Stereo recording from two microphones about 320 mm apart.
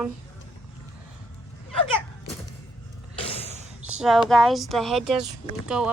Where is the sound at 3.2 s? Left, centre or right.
Centre.